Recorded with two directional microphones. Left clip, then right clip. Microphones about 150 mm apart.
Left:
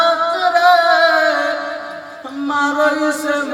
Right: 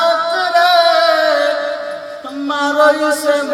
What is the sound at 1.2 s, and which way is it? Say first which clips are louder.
Music: right 2 dB; 50° right (ahead or behind).